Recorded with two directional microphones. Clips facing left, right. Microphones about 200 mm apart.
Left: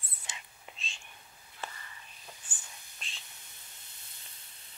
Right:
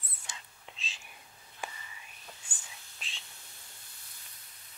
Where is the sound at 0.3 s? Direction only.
25° left (ahead or behind).